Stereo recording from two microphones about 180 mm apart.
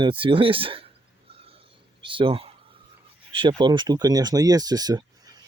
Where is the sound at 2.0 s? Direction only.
30° right (ahead or behind).